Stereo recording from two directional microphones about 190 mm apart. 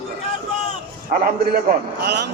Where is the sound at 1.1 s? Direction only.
45° right (ahead or behind).